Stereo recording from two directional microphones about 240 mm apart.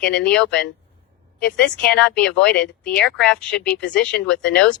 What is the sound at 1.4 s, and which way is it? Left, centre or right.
Speech, centre.